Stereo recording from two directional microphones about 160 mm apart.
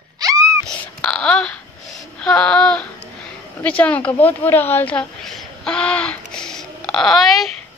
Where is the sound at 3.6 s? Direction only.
10° left (ahead or behind).